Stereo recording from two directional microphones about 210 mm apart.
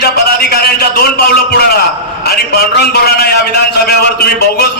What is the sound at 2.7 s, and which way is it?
A man's voice, 50° left (ahead or behind).